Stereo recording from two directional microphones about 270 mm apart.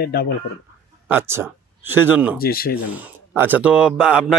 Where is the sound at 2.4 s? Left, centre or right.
Left.